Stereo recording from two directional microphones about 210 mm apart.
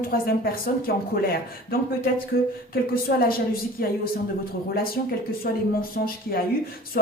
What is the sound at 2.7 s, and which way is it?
Speech, 45° left (ahead or behind).